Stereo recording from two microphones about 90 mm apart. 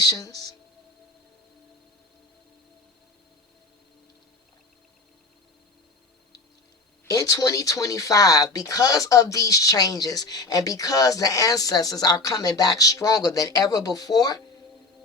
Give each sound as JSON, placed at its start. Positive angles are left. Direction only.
{"t": 0.0, "sound": "speech", "side_deg": 45}
{"t": 7.1, "sound": "speech", "side_deg": 40}